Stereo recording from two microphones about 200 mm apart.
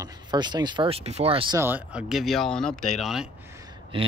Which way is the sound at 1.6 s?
10° right (ahead or behind).